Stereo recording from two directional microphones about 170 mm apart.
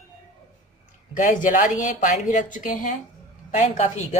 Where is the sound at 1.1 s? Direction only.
50° left (ahead or behind).